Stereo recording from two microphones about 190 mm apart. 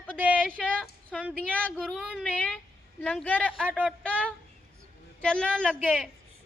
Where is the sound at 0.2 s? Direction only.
10° right (ahead or behind).